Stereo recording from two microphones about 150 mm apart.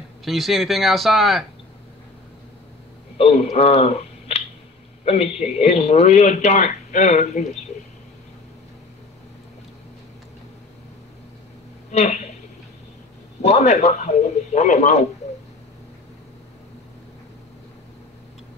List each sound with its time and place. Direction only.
0.2 s speech: centre (ahead or behind)
3.2 s speech: 40° left (ahead or behind)
11.9 s a woman's voice: 50° left (ahead or behind)
13.4 s speech: 45° left (ahead or behind)